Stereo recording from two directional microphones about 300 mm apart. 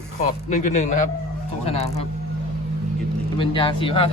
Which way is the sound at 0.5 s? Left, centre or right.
Left.